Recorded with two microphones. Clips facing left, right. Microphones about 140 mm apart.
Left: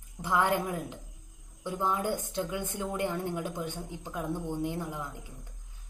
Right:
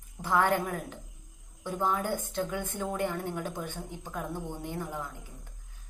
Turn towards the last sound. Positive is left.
turn(degrees=15)  # may be behind; listen again after turning